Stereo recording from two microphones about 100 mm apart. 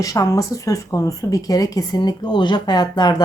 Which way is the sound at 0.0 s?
35° left (ahead or behind).